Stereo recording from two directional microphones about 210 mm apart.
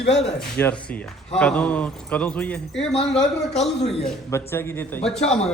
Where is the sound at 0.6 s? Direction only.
10° left (ahead or behind).